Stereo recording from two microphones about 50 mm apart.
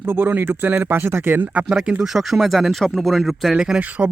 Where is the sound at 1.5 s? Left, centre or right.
Right.